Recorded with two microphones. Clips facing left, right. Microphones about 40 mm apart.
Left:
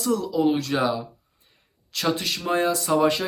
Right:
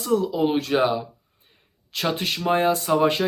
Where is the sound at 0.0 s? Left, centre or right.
Right.